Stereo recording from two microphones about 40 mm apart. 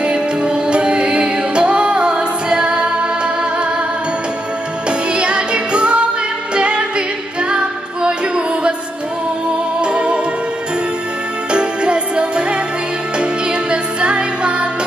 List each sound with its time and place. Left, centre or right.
0.0 s music: right
4.8 s music: right
9.8 s music: right
11.5 s music: right